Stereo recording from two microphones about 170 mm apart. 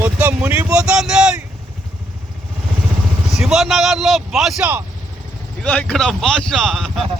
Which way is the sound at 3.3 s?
5° right (ahead or behind).